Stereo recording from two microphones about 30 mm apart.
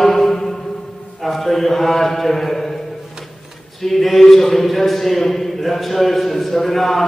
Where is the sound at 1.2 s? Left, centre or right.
Centre.